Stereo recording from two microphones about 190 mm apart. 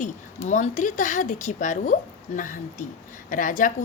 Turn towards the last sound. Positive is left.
turn(degrees=45)  # may be behind; listen again after turning